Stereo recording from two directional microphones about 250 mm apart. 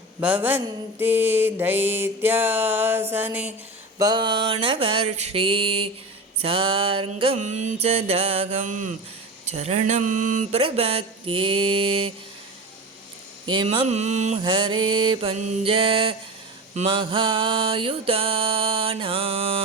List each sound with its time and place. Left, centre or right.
0.2 s mantra: centre; by 12.1 s right
13.4 s mantra: centre